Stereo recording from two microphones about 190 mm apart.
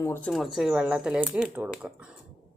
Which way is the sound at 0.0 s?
10° left (ahead or behind).